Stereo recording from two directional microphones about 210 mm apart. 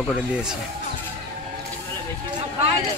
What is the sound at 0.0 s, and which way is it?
Speech, 5° right (ahead or behind).